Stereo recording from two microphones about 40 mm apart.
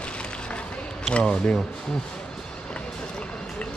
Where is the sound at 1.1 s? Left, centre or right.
Left.